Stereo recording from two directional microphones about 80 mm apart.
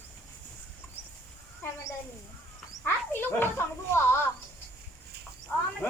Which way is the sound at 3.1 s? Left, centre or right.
Left.